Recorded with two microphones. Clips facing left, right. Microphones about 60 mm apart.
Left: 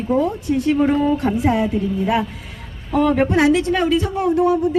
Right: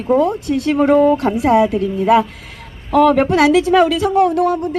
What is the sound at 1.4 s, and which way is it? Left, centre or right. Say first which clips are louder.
A woman's voice: right 5 dB; right.